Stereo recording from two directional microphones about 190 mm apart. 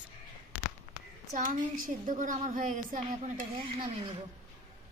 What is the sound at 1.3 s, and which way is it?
A woman's voice, 45° right (ahead or behind).